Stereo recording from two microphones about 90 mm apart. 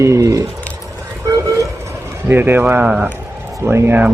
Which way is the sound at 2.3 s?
25° right (ahead or behind).